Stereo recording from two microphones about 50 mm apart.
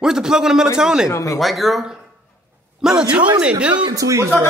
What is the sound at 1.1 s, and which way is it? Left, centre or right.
Speech, left.